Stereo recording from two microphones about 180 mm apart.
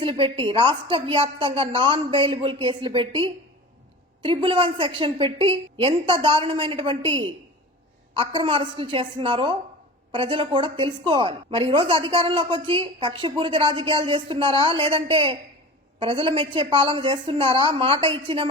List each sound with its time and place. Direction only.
0.0 s a woman's voice: 30° right (ahead or behind)